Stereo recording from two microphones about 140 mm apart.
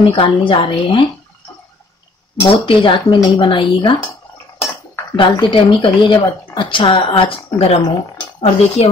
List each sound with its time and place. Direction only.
0.1 s speech: 40° left (ahead or behind)
2.5 s speech: 35° left (ahead or behind)
5.1 s speech: 35° left (ahead or behind)